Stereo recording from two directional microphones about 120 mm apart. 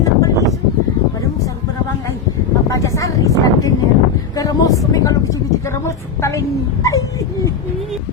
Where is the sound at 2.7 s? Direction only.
25° left (ahead or behind).